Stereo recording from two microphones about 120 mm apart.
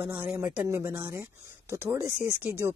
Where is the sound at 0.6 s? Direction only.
25° right (ahead or behind).